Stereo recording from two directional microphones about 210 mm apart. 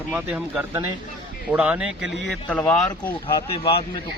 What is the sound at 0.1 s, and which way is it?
Speech, 5° right (ahead or behind).